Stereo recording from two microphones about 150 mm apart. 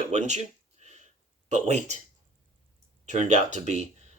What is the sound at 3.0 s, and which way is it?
Speech, 55° right (ahead or behind).